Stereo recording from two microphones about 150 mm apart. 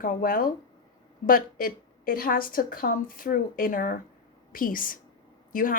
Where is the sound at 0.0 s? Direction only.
70° left (ahead or behind).